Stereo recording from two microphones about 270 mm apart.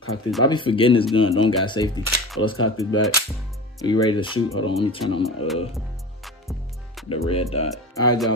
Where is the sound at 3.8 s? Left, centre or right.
Centre.